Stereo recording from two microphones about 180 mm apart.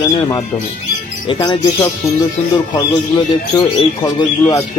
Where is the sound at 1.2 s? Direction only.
25° left (ahead or behind).